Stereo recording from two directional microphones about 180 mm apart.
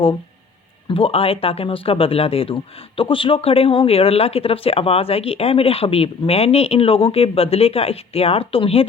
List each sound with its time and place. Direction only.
0.9 s speech: 30° left (ahead or behind)